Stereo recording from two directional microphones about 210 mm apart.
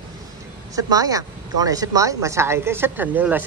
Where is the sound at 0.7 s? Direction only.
15° right (ahead or behind).